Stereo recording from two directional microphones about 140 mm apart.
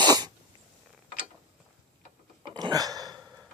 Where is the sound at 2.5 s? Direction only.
25° right (ahead or behind).